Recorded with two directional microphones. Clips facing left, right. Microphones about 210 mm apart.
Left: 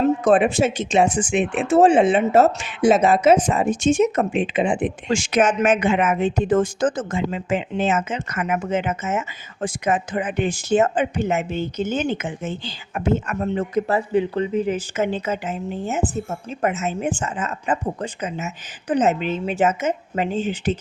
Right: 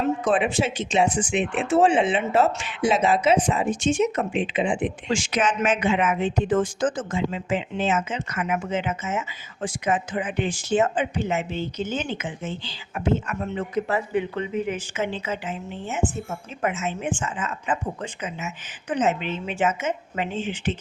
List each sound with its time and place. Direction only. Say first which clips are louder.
0.0 s a woman's voice: left 6 dB; 45° left (ahead or behind)
15.0 s a woman's voice: left 4 dB; 45° left (ahead or behind)